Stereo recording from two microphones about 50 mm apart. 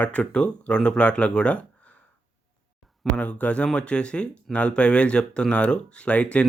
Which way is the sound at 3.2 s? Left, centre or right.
Left.